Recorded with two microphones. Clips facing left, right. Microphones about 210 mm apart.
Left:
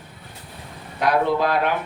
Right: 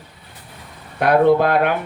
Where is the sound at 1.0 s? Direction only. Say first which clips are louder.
Right 6 dB; 55° right (ahead or behind).